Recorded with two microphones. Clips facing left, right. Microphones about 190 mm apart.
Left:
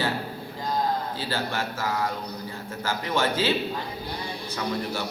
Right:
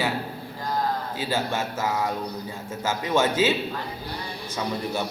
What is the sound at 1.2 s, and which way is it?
Speech, 20° right (ahead or behind).